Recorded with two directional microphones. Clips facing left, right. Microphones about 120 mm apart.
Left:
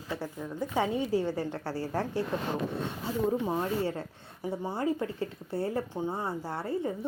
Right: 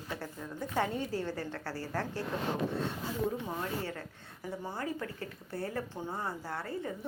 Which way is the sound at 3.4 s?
25° left (ahead or behind).